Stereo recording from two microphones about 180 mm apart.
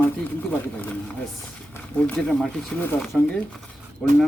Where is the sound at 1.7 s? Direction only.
5° left (ahead or behind).